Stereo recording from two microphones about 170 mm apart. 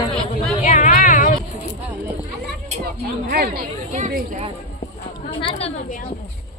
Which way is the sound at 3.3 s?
65° right (ahead or behind).